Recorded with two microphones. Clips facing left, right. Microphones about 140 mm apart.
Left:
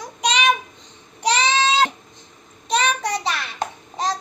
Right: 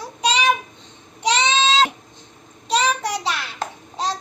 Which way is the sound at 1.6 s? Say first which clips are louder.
Right 1 dB; 25° right (ahead or behind).